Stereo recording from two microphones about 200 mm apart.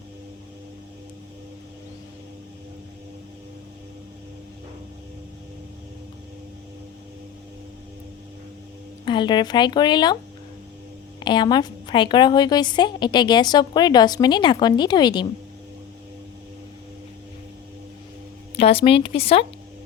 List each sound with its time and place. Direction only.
9.0 s a woman's voice: 25° left (ahead or behind)
11.2 s a woman's voice: 20° left (ahead or behind)
18.5 s a woman's voice: 30° left (ahead or behind)